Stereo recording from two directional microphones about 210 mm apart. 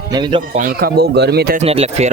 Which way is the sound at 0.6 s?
45° right (ahead or behind).